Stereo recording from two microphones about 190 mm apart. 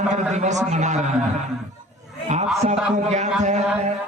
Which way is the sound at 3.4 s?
40° right (ahead or behind).